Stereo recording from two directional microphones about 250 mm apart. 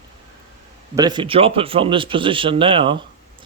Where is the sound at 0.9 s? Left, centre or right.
Centre.